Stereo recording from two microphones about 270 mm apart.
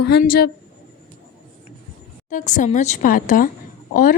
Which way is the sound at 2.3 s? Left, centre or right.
Left.